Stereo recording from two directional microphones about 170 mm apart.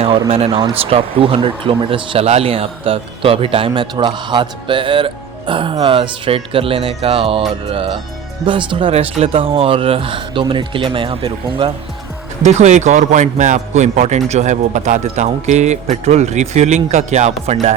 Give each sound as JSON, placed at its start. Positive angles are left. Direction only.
{"t": 0.3, "sound": "speech", "side_deg": -35}
{"t": 8.4, "sound": "speech", "side_deg": -30}
{"t": 12.4, "sound": "a man's voice", "side_deg": -40}